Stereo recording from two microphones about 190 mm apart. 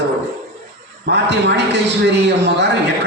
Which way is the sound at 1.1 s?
65° right (ahead or behind).